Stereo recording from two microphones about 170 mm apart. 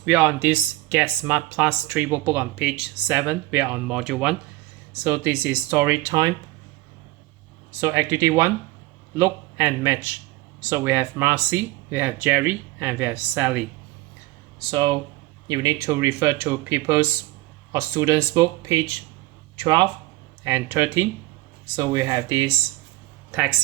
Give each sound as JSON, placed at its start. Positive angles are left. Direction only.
{"t": 0.0, "sound": "speech", "side_deg": -10}
{"t": 7.8, "sound": "speech", "side_deg": -15}
{"t": 14.7, "sound": "speech", "side_deg": -25}
{"t": 20.4, "sound": "speech", "side_deg": -15}